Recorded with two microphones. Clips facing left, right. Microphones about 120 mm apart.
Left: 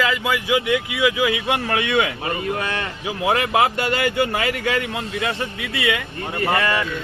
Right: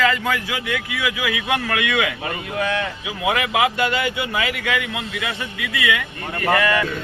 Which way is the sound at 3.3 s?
40° left (ahead or behind).